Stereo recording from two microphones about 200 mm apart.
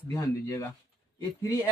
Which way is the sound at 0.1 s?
15° left (ahead or behind).